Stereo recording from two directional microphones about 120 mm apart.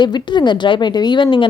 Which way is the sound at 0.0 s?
40° left (ahead or behind).